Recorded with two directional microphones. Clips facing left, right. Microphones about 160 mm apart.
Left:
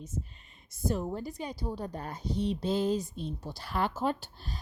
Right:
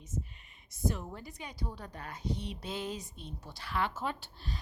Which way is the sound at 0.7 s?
35° left (ahead or behind).